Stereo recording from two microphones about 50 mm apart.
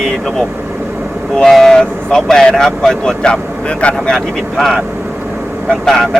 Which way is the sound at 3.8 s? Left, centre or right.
Left.